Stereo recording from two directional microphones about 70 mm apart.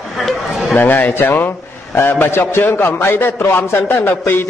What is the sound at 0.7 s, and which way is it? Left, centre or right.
A man's voice, left.